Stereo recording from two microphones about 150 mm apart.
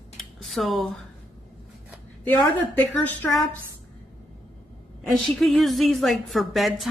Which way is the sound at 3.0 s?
10° left (ahead or behind).